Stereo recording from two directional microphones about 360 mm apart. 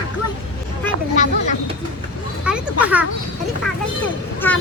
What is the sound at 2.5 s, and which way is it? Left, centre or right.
Speech, centre.